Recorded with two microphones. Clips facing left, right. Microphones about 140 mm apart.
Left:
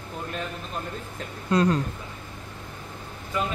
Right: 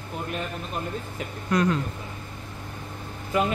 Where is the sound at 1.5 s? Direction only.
30° left (ahead or behind).